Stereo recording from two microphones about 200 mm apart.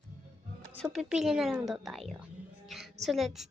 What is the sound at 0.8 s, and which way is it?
A woman's voice, centre (ahead or behind).